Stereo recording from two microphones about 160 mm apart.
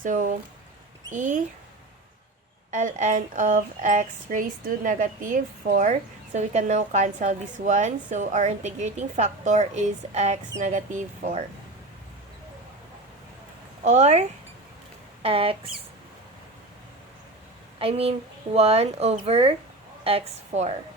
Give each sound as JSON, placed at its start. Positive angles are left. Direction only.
{"t": 0.0, "sound": "speech", "side_deg": -55}
{"t": 2.6, "sound": "speech", "side_deg": -50}
{"t": 13.8, "sound": "speech", "side_deg": -45}
{"t": 17.7, "sound": "speech", "side_deg": -35}